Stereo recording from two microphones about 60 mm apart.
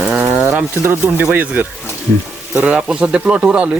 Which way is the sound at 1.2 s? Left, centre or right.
Right.